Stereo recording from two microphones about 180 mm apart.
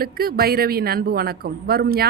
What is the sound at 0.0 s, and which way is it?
Speech, 55° right (ahead or behind).